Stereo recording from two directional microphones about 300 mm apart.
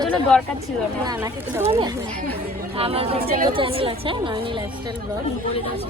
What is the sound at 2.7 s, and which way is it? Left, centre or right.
A woman's voice, centre.